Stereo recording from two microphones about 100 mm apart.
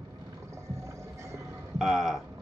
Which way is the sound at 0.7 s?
30° right (ahead or behind).